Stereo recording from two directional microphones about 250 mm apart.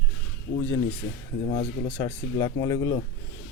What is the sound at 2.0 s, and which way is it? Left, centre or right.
A man's voice, centre.